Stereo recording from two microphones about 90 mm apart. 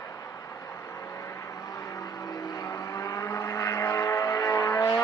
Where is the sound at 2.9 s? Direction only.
40° left (ahead or behind).